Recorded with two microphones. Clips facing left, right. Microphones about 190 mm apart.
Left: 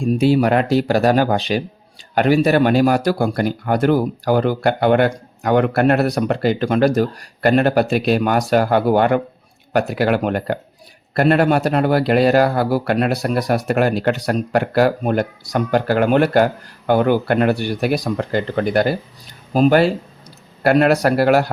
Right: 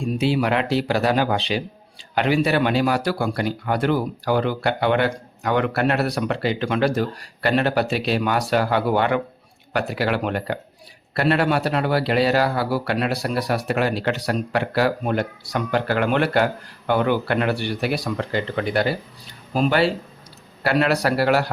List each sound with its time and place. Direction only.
0.2 s speech: 45° left (ahead or behind)